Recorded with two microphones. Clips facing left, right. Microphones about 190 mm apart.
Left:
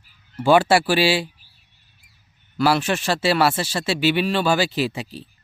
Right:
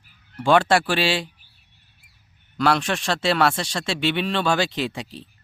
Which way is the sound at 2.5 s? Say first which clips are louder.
Left 2 dB; 5° left (ahead or behind).